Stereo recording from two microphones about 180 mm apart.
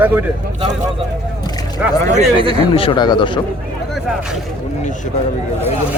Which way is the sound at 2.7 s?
30° left (ahead or behind).